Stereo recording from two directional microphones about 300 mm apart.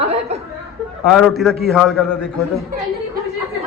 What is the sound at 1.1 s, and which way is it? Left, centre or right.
A man's voice, centre.